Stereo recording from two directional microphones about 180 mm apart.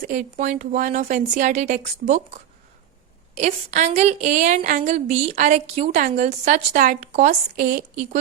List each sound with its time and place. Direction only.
0.1 s a woman's voice: 45° right (ahead or behind)
3.3 s a woman's voice: 40° right (ahead or behind)
7.5 s a woman's voice: 55° right (ahead or behind)